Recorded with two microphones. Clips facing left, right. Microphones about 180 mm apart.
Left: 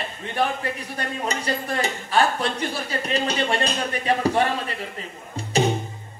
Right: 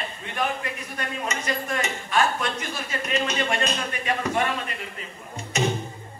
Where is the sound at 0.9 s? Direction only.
35° left (ahead or behind).